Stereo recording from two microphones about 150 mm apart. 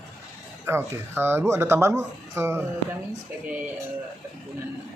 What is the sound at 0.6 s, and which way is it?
Speech, 15° right (ahead or behind).